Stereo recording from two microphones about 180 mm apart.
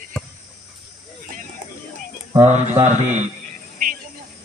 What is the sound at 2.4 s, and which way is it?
Speech, 40° right (ahead or behind).